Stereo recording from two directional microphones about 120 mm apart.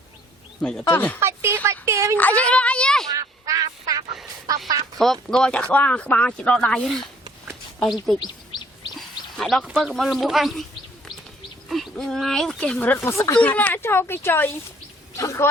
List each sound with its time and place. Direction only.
0.6 s speech: 5° left (ahead or behind)
1.2 s speech: 20° right (ahead or behind)
2.1 s speech: 10° left (ahead or behind)
3.1 s quack: 30° right (ahead or behind)
4.9 s speech: 5° left (ahead or behind)
8.2 s bird: 35° left (ahead or behind)
9.0 s a sound: centre (ahead or behind)
9.6 s speech: 5° right (ahead or behind)
11.7 s speech: centre (ahead or behind); by 13.4 s 25° left (ahead or behind)
13.4 s speech: 15° left (ahead or behind)
15.1 s a sound: 25° left (ahead or behind)